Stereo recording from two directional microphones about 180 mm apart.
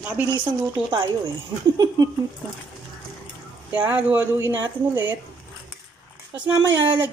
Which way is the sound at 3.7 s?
10° right (ahead or behind).